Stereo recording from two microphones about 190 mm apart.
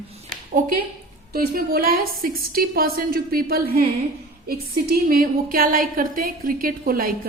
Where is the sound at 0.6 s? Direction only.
45° right (ahead or behind).